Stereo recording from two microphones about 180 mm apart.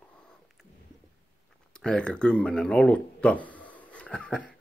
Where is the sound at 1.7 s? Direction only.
5° left (ahead or behind).